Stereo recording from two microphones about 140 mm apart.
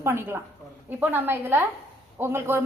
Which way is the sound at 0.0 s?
15° right (ahead or behind).